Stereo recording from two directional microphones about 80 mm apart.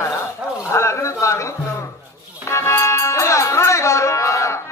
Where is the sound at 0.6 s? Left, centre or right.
Left.